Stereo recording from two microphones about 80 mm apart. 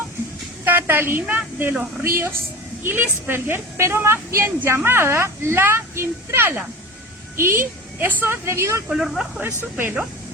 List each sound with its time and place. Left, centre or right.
0.6 s a sound: right
1.7 s speech: centre
2.0 s a woman's voice: right
8.9 s speech: centre
9.7 s speech: right